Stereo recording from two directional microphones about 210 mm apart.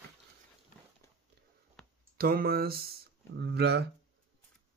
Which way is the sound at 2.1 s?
45° right (ahead or behind).